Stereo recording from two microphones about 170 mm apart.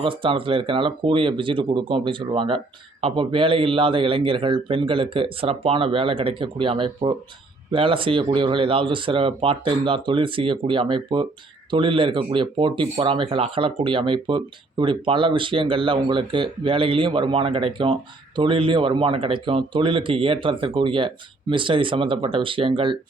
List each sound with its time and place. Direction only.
0.0 s speech: 30° right (ahead or behind)